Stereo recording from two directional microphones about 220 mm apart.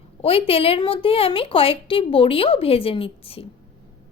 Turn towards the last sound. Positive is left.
turn(degrees=25)  # may be behind; listen again after turning